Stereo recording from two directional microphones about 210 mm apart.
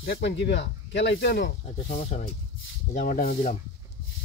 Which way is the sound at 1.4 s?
45° left (ahead or behind).